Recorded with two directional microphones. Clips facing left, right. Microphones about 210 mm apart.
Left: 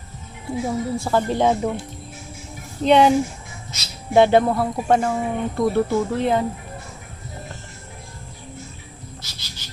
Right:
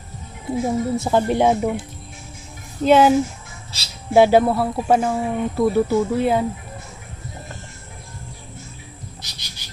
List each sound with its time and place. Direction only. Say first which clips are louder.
0.5 s a woman's voice: right 3 dB; 20° right (ahead or behind)
2.8 s speech: right 1 dB; 5° right (ahead or behind)
3.7 s speech: left 1 dB; 30° right (ahead or behind)
4.1 s speech: right 1 dB; 5° right (ahead or behind)
9.2 s a sound: left 1 dB; 15° right (ahead or behind)